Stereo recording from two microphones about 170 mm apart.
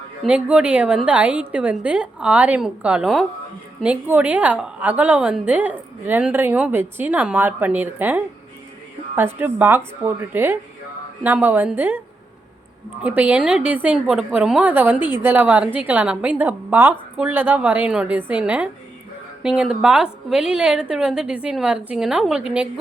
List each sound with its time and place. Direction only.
0.2 s a woman's voice: 5° right (ahead or behind)